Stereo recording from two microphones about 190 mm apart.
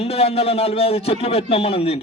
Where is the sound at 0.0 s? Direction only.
30° left (ahead or behind).